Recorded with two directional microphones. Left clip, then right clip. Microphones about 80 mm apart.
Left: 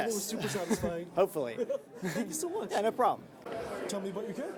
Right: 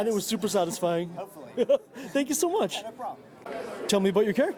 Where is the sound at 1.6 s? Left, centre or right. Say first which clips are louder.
Right 10 dB; right.